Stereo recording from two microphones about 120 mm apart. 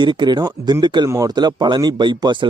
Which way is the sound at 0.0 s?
40° right (ahead or behind).